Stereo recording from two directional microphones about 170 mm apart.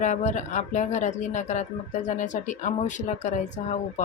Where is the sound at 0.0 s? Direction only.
45° left (ahead or behind).